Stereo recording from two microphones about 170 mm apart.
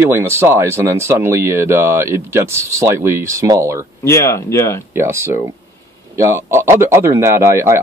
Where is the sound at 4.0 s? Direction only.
15° left (ahead or behind).